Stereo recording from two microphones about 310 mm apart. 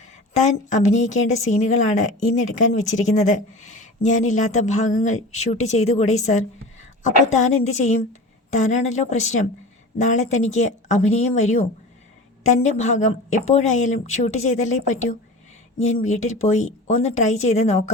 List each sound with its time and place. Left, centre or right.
0.4 s a woman's voice: left